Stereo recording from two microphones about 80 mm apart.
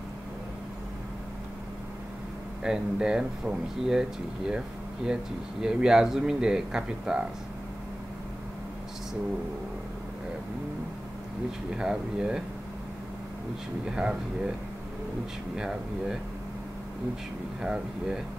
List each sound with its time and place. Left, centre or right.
2.6 s speech: centre
11.7 s speech: centre
13.8 s speech: centre
15.5 s speech: centre
17.6 s speech: centre